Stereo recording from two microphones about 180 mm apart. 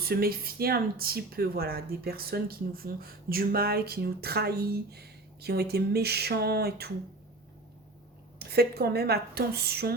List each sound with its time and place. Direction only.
0.0 s speech: 55° right (ahead or behind)
8.4 s speech: 60° right (ahead or behind)